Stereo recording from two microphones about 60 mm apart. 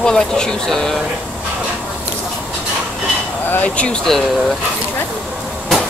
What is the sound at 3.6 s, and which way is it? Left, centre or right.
Speech, centre.